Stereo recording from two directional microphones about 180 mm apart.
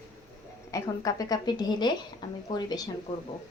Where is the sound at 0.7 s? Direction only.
20° left (ahead or behind).